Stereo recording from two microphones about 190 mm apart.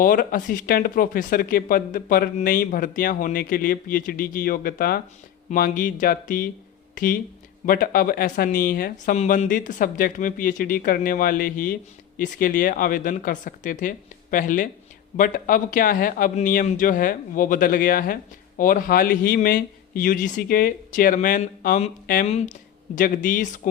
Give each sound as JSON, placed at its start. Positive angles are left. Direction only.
{"t": 0.0, "sound": "speech", "side_deg": 45}
{"t": 22.3, "sound": "speech", "side_deg": 35}